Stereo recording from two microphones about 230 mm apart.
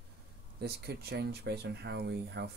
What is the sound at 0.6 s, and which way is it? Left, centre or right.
Speech, right.